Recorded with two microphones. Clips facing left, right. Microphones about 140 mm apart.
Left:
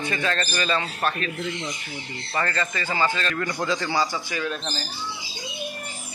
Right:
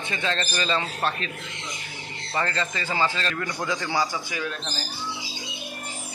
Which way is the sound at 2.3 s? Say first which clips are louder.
Left 1 dB; 20° right (ahead or behind).